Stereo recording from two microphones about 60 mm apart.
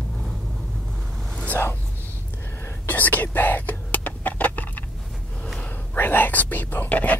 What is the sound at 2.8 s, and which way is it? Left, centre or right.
Whispering, left.